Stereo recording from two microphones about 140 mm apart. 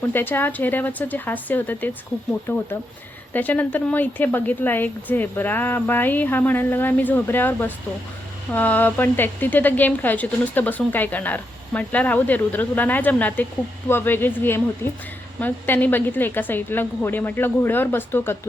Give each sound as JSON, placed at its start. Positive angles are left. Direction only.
{"t": 0.1, "sound": "speech", "side_deg": 15}